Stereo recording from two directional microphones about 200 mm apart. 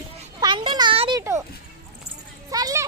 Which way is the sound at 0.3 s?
25° right (ahead or behind).